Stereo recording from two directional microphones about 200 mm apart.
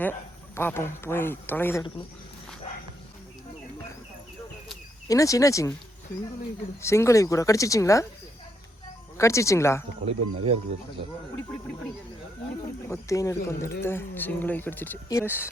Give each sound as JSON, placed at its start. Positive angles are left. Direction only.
{"t": 0.0, "sound": "speech", "side_deg": 10}
{"t": 5.0, "sound": "speech", "side_deg": 15}
{"t": 6.8, "sound": "speech", "side_deg": 15}
{"t": 9.1, "sound": "speech", "side_deg": 15}
{"t": 10.1, "sound": "speech", "side_deg": -30}
{"t": 12.9, "sound": "speech", "side_deg": 15}